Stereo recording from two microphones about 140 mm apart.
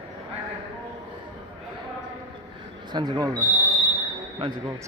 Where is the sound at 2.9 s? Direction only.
30° right (ahead or behind).